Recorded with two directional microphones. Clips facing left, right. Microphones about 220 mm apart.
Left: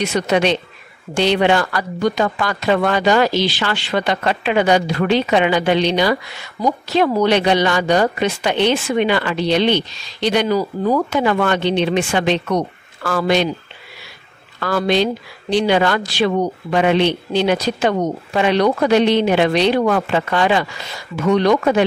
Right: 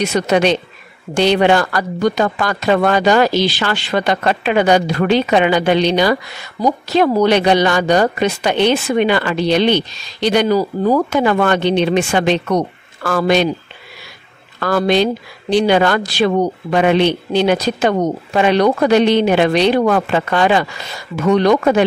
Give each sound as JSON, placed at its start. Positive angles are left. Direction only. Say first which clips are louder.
{"t": 0.0, "sound": "speech", "louder": "right 2 dB", "side_deg": -40}
{"t": 14.6, "sound": "speech", "louder": "right 3 dB", "side_deg": -45}